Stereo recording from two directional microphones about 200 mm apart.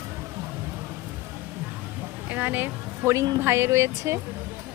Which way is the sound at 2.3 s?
10° right (ahead or behind).